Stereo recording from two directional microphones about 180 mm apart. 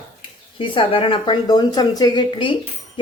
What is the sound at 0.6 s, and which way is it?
Speech, 30° left (ahead or behind).